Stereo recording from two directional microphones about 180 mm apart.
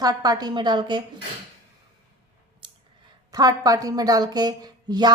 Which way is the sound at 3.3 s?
20° right (ahead or behind).